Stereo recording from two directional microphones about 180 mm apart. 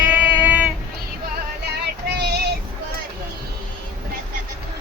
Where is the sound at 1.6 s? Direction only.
70° right (ahead or behind).